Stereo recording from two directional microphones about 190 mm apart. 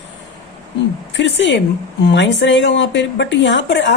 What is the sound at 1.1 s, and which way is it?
Speech, 70° left (ahead or behind).